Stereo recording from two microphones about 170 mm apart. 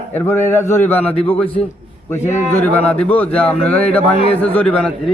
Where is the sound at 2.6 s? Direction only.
10° left (ahead or behind).